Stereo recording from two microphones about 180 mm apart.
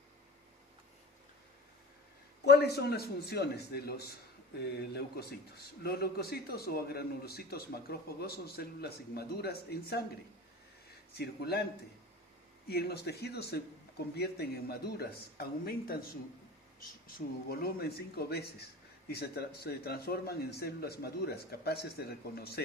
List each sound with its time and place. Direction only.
2.4 s a man's voice: 65° left (ahead or behind)
11.1 s a man's voice: 65° left (ahead or behind)
12.6 s a man's voice: 60° left (ahead or behind)
17.5 s a man's voice: 60° left (ahead or behind)